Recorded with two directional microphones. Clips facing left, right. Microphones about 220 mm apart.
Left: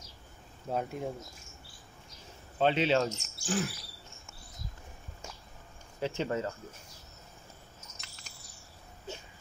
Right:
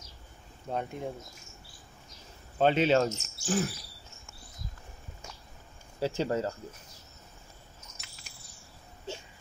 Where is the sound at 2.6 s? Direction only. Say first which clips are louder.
Right 3 dB; 45° right (ahead or behind).